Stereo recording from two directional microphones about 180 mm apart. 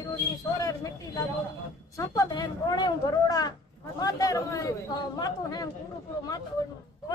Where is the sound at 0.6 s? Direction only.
20° left (ahead or behind).